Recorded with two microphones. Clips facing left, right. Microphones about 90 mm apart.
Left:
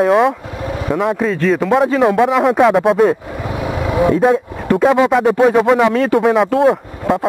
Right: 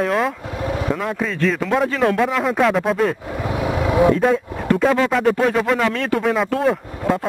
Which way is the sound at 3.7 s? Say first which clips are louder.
Even; 25° left (ahead or behind).